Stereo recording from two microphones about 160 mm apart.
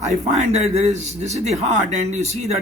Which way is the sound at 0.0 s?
45° right (ahead or behind).